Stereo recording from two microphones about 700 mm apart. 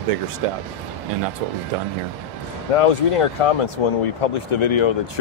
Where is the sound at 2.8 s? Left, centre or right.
Left.